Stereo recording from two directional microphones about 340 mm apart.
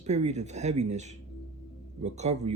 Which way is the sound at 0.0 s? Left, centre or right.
Centre.